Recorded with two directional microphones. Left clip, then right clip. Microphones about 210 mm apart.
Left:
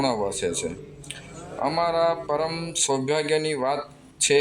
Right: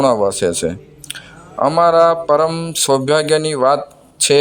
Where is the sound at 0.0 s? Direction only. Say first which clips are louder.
Right 11 dB; 40° right (ahead or behind).